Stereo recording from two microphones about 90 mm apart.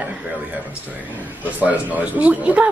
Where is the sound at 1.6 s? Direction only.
15° right (ahead or behind).